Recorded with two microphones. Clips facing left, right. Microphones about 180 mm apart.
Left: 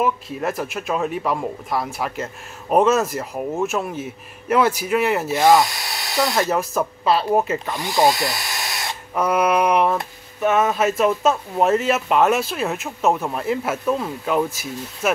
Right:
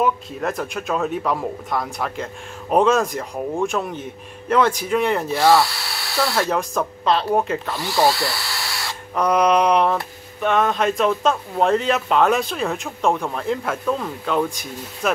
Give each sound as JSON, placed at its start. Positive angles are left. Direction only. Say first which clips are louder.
{"t": 0.0, "sound": "a man's voice", "louder": "even", "side_deg": 5}
{"t": 5.3, "sound": "speech", "louder": "left 1 dB", "side_deg": 20}
{"t": 6.5, "sound": "a man's voice", "louder": "left 1 dB", "side_deg": 5}
{"t": 7.7, "sound": "speech", "louder": "left 1 dB", "side_deg": 20}
{"t": 9.1, "sound": "a sound", "louder": "right 2 dB", "side_deg": 5}
{"t": 10.4, "sound": "a man's voice", "louder": "left 1 dB", "side_deg": 5}